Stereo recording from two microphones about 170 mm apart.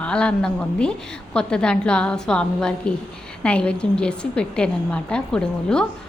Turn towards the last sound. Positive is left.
turn(degrees=5)  # may be behind; listen again after turning